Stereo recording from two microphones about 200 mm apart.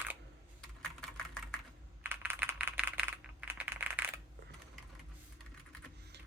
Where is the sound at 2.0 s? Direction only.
10° right (ahead or behind).